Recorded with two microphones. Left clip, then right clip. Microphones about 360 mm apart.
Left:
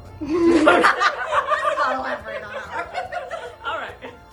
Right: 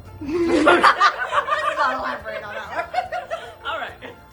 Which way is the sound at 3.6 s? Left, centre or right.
Centre.